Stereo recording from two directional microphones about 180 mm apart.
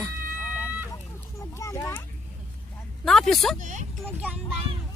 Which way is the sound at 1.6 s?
15° left (ahead or behind).